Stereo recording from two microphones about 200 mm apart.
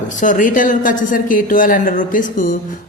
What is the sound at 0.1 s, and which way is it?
A man's voice, 40° left (ahead or behind).